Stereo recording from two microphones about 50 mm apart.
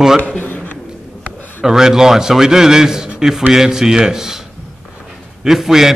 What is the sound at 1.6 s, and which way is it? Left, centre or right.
A man's voice, centre.